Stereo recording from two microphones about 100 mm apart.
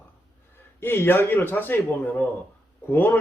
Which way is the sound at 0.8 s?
20° left (ahead or behind).